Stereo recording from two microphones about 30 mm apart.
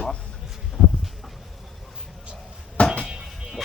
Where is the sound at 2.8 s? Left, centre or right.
Left.